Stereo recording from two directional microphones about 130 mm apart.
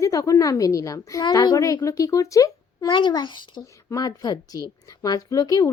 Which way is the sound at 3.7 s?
25° left (ahead or behind).